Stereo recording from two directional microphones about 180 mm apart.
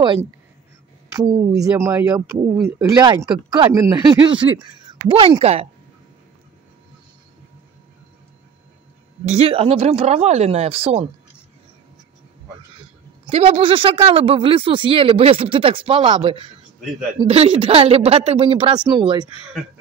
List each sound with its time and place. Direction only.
1.1 s speech: 20° right (ahead or behind); by 5.7 s 35° right (ahead or behind)
9.3 s speech: 30° right (ahead or behind)
13.3 s speech: 30° right (ahead or behind)